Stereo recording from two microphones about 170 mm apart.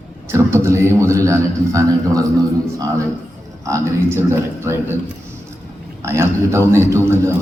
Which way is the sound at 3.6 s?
15° right (ahead or behind).